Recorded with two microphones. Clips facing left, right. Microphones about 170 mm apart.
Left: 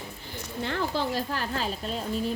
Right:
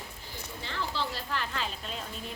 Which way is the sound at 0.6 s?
50° left (ahead or behind).